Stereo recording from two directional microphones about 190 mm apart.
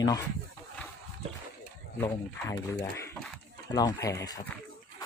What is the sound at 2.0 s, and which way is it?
Speech, 20° left (ahead or behind).